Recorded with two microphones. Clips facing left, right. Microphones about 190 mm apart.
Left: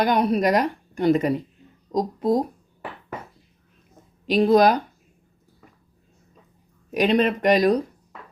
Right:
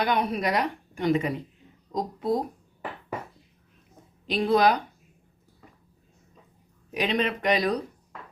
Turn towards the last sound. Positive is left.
turn(degrees=45)  # may be behind; listen again after turning